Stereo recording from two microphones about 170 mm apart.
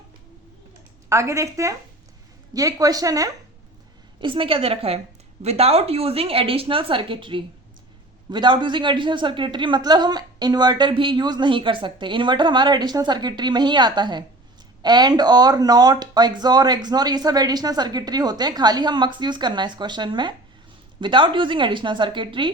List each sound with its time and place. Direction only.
1.1 s a woman's voice: 15° right (ahead or behind)